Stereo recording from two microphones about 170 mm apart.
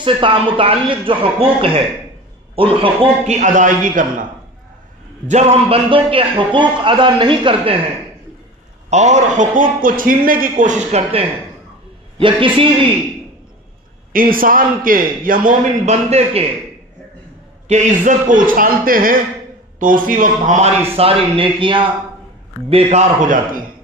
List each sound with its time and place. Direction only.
0.0 s speech: 30° right (ahead or behind)
3.3 s a man's voice: 45° right (ahead or behind)
5.3 s a man's voice: 35° right (ahead or behind)
8.9 s a man's voice: 45° right (ahead or behind)
14.1 s a man's voice: 55° right (ahead or behind); by 16.5 s 35° right (ahead or behind)
17.6 s a man's voice: 45° right (ahead or behind)
20.9 s a man's voice: 35° right (ahead or behind); by 23.6 s 50° right (ahead or behind)